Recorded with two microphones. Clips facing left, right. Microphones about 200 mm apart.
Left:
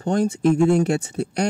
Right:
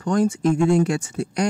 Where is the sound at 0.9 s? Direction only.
60° left (ahead or behind).